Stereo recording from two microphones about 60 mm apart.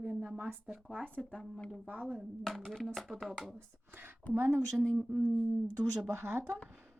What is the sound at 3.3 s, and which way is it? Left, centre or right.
Speech, centre.